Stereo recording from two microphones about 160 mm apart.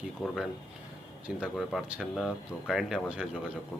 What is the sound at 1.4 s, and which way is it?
Speech, centre (ahead or behind).